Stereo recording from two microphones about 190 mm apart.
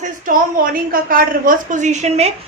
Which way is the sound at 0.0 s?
45° right (ahead or behind).